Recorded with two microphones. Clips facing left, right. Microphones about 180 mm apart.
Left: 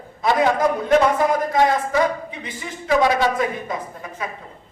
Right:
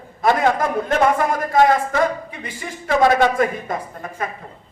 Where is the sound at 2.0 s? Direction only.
50° right (ahead or behind).